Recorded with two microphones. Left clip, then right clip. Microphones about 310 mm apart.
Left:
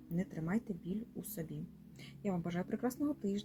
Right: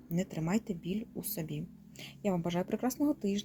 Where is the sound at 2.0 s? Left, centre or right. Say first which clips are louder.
Right 7 dB; right.